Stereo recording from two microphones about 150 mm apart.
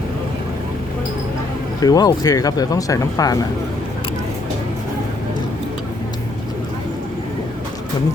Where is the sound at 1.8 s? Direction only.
25° left (ahead or behind).